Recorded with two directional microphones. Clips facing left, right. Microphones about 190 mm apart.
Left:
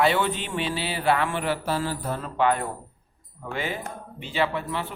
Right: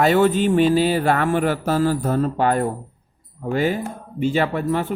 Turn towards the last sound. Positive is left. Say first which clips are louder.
# right 8 dB
turn(degrees=-45)  # may be behind; listen again after turning